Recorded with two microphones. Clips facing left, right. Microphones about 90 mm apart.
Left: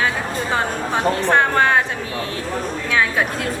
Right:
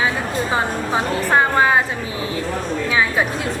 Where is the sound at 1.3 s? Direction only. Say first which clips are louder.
Right 1 dB; 5° right (ahead or behind).